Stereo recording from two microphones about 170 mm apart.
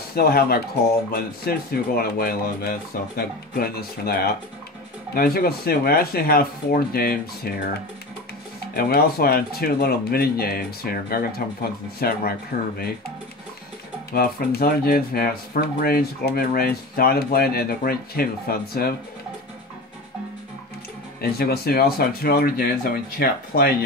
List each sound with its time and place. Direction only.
0.1 s speech: 65° left (ahead or behind)
8.7 s speech: 65° left (ahead or behind)
14.1 s speech: 65° left (ahead or behind)
21.2 s speech: 65° left (ahead or behind)